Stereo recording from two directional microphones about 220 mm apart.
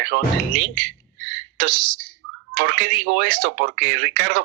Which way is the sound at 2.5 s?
45° right (ahead or behind).